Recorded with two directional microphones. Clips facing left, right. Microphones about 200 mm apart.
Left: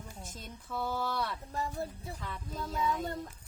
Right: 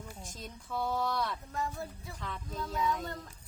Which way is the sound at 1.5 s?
30° left (ahead or behind).